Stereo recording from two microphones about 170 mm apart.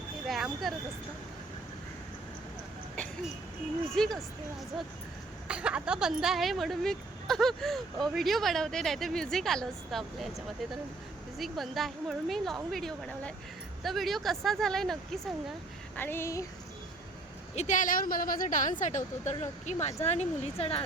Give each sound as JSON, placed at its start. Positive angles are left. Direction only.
{"t": 0.3, "sound": "a sound", "side_deg": 0}
{"t": 3.9, "sound": "speech", "side_deg": 0}
{"t": 5.5, "sound": "speech", "side_deg": -5}
{"t": 16.0, "sound": "speech", "side_deg": 15}
{"t": 17.5, "sound": "speech", "side_deg": 45}